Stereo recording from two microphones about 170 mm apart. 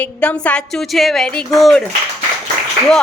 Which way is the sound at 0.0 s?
5° left (ahead or behind).